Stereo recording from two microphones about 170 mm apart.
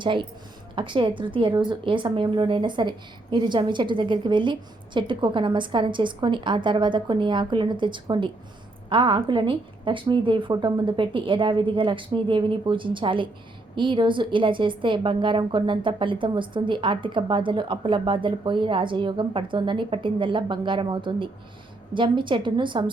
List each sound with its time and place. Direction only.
0.0 s a woman's voice: 30° right (ahead or behind)